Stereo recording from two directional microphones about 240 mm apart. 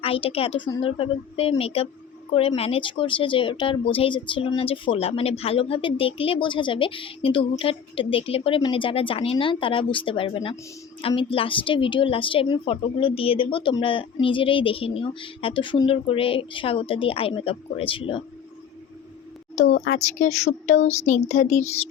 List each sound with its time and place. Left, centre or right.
0.0 s a woman's voice: left
19.6 s speech: left
20.1 s a woman's voice: left